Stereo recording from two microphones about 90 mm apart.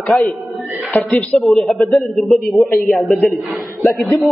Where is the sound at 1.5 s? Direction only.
Centre (ahead or behind).